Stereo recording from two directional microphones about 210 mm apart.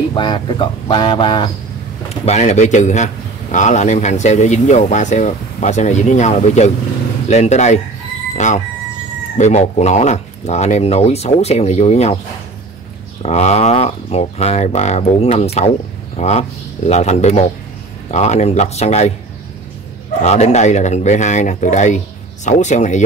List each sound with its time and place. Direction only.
0.1 s speech: 20° left (ahead or behind)
13.2 s speech: 30° left (ahead or behind)
20.2 s speech: 30° left (ahead or behind)